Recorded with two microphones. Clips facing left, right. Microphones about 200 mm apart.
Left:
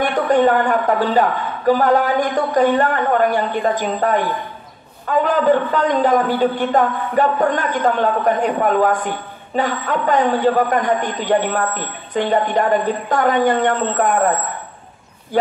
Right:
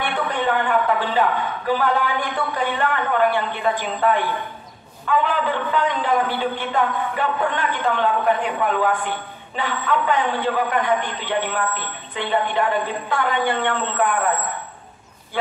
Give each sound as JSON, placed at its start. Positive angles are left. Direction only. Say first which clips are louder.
{"t": 0.0, "sound": "a man's voice", "louder": "left 8 dB", "side_deg": 45}